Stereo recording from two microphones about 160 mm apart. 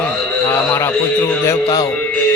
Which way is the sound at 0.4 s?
15° left (ahead or behind).